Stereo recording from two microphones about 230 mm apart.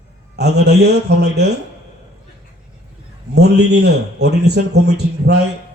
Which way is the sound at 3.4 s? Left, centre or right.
Right.